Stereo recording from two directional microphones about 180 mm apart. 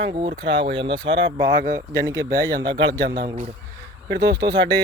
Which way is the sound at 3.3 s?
40° right (ahead or behind).